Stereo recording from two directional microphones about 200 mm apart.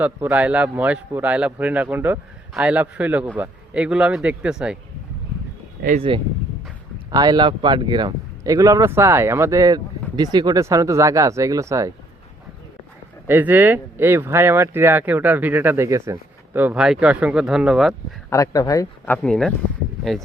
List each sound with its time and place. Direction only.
0.0 s speech: 10° right (ahead or behind)
6.1 s speech: 25° right (ahead or behind)
13.2 s speech: 10° right (ahead or behind)
18.3 s speech: 15° left (ahead or behind)